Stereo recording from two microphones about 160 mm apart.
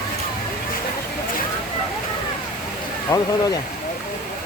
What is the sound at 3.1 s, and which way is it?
Speech, 20° left (ahead or behind).